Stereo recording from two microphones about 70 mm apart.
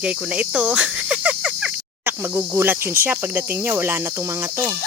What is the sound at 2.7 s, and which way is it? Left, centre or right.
Cricket, right.